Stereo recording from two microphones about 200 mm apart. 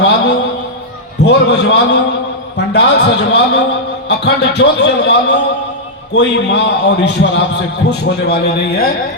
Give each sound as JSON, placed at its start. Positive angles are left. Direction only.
{"t": 0.0, "sound": "a man's voice", "side_deg": 60}